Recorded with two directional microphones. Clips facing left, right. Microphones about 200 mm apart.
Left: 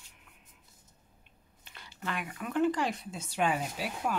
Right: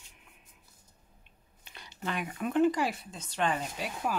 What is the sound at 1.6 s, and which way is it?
Speech, 20° right (ahead or behind).